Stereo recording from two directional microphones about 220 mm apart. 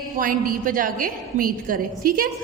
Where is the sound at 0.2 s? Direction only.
40° right (ahead or behind).